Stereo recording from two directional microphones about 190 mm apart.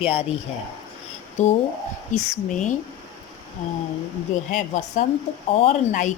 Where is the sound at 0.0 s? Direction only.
30° left (ahead or behind).